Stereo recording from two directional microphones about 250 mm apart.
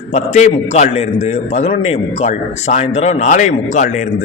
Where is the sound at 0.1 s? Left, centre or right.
Left.